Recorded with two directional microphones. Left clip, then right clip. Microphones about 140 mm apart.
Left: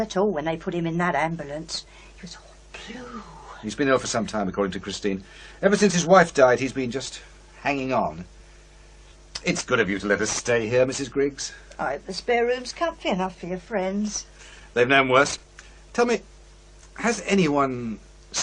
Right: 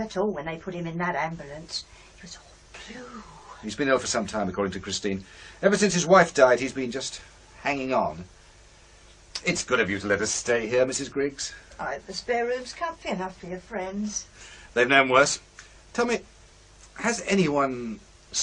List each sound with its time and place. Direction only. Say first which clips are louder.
0.0 s speech: left 5 dB; 50° left (ahead or behind)
2.7 s whispering: left 4 dB; 50° left (ahead or behind)
3.6 s speech: left 2 dB; 45° left (ahead or behind)
9.3 s speech: left 1 dB; 40° left (ahead or behind)
14.7 s speech: left 1 dB; 35° left (ahead or behind); by 16.2 s 50° left (ahead or behind)
16.9 s speech: left 2 dB; 35° left (ahead or behind)